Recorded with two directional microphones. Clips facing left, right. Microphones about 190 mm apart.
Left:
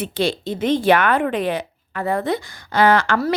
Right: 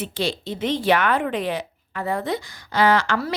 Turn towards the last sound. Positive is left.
turn(degrees=55)  # may be behind; listen again after turning